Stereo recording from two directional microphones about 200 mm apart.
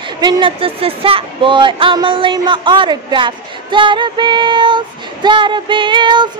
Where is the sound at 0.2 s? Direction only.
25° right (ahead or behind).